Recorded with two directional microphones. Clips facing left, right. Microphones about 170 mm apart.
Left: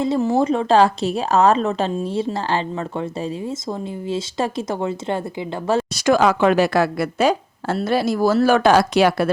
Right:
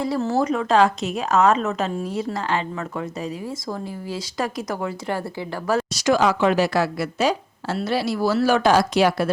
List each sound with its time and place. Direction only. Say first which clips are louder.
0.0 s a woman's voice: left 4 dB; 20° left (ahead or behind)
5.9 s a woman's voice: left 3 dB; 55° left (ahead or behind)